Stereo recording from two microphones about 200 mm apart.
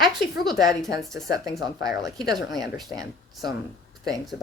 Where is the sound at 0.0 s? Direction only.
Centre (ahead or behind).